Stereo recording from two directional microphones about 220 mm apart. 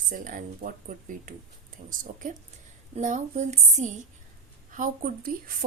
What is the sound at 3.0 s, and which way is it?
Speech, 35° right (ahead or behind).